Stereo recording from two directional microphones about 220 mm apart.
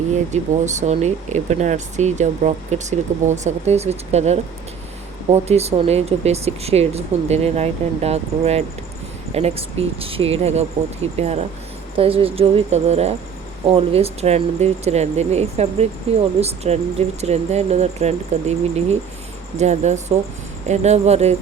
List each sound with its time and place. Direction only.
0.1 s speech: 35° right (ahead or behind)